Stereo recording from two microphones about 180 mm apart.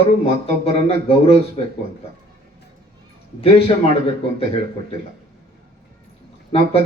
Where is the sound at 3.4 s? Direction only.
35° left (ahead or behind).